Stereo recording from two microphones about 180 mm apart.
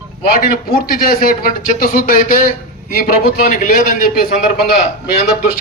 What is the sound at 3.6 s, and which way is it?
A man's voice, 50° left (ahead or behind).